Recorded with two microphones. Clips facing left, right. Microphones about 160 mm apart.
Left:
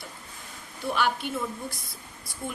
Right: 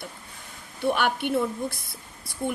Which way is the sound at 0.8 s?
60° right (ahead or behind).